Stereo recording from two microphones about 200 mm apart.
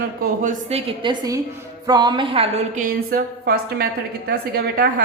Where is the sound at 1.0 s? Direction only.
20° right (ahead or behind).